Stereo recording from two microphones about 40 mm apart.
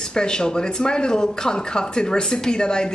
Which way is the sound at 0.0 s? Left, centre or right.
Centre.